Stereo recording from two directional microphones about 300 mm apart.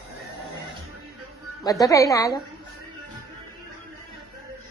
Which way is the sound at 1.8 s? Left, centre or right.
Centre.